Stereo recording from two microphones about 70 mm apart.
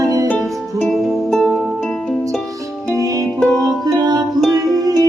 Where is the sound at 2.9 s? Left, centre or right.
Right.